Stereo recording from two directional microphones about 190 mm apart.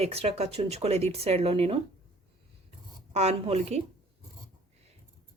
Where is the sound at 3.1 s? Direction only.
35° right (ahead or behind).